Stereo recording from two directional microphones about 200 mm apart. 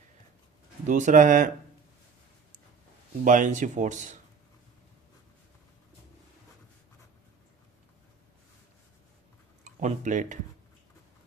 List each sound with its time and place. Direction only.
0.9 s speech: 40° right (ahead or behind)
3.2 s speech: 40° right (ahead or behind)
9.6 s speech: 40° right (ahead or behind)